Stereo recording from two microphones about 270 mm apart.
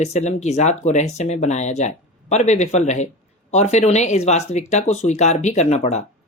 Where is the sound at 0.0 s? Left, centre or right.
Left.